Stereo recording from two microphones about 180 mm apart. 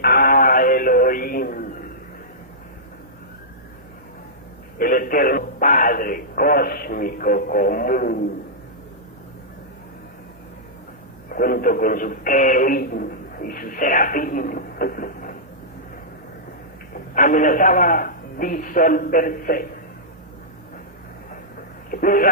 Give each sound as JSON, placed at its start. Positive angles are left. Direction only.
{"t": 0.0, "sound": "synthetic singing", "side_deg": 55}
{"t": 4.8, "sound": "radio", "side_deg": 50}
{"t": 11.3, "sound": "radio", "side_deg": 55}
{"t": 17.2, "sound": "a man's voice", "side_deg": 50}
{"t": 21.8, "sound": "speech", "side_deg": 50}